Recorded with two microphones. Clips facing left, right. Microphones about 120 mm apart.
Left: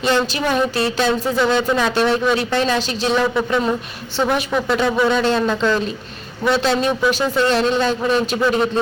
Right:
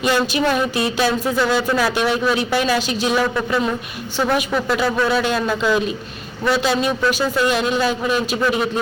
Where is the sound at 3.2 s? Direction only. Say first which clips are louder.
Left 2 dB; centre (ahead or behind).